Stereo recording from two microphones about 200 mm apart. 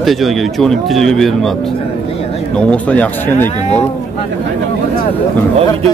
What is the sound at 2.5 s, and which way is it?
Speech, 5° left (ahead or behind).